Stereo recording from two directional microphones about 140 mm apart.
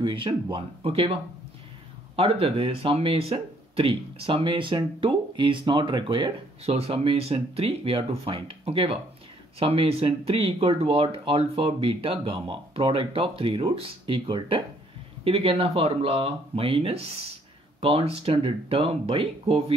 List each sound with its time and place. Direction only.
0.0 s speech: 35° right (ahead or behind)
2.1 s speech: 45° right (ahead or behind)